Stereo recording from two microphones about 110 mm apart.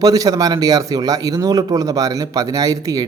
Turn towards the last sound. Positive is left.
turn(degrees=-35)  # may be behind; listen again after turning